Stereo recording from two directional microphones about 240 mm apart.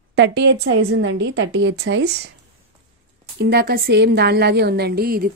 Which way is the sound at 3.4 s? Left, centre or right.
Right.